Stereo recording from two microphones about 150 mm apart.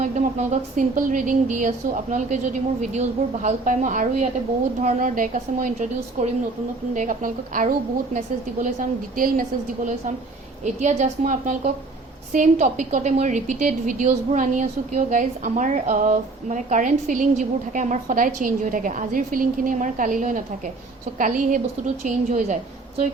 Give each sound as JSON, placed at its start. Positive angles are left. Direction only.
{"t": 0.0, "sound": "a woman's voice", "side_deg": -55}
{"t": 10.6, "sound": "a woman's voice", "side_deg": -50}